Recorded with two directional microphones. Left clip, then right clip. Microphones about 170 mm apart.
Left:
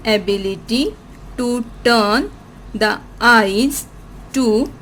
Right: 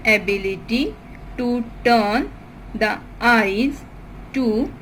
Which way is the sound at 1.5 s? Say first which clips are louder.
Left 2 dB; 90° left.